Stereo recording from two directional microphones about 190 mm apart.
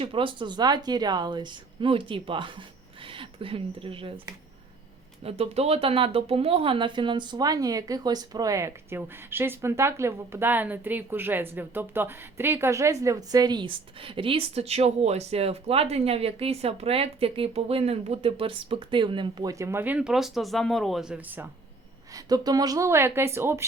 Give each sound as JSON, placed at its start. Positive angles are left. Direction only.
{"t": 0.0, "sound": "speech", "side_deg": -25}
{"t": 5.2, "sound": "speech", "side_deg": -35}
{"t": 22.1, "sound": "speech", "side_deg": -20}